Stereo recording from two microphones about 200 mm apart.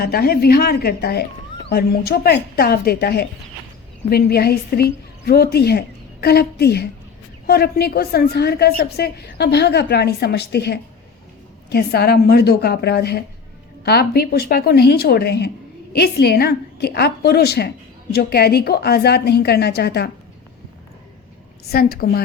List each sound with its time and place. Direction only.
0.0 s a woman's voice: 50° left (ahead or behind)
21.7 s a woman's voice: 50° left (ahead or behind)